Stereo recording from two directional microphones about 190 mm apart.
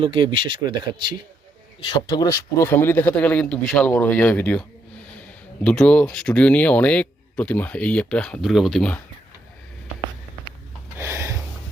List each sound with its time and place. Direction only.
0.0 s speech: 25° right (ahead or behind)
1.8 s speech: 20° left (ahead or behind)
5.6 s speech: 5° left (ahead or behind)
10.9 s a sound: 15° right (ahead or behind)